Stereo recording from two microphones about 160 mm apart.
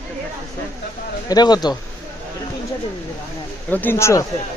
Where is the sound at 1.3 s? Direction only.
25° left (ahead or behind).